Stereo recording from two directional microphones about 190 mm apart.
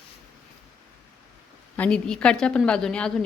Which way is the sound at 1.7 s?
5° left (ahead or behind).